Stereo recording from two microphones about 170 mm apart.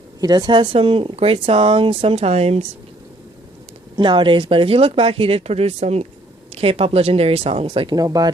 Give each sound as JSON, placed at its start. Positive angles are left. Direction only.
{"t": 0.2, "sound": "speech", "side_deg": -25}
{"t": 3.9, "sound": "speech", "side_deg": -30}